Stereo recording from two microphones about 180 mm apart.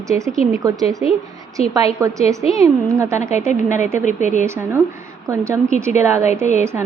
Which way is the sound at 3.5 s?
40° left (ahead or behind).